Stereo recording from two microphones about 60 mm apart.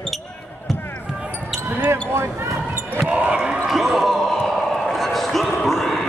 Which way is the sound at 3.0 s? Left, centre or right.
Centre.